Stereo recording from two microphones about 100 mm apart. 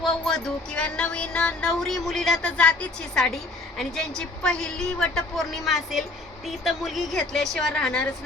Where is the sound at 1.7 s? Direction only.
5° left (ahead or behind).